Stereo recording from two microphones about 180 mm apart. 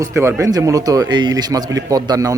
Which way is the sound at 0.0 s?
15° right (ahead or behind).